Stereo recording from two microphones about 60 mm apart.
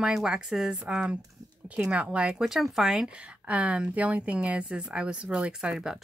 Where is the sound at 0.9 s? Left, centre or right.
Centre.